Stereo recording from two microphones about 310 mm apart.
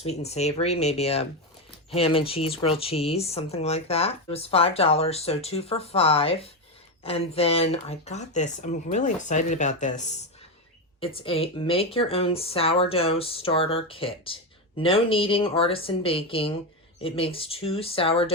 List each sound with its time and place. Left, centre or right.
0.0 s speech: left